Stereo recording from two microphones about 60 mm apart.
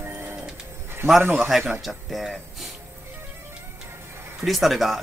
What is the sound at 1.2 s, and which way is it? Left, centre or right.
Speech, right.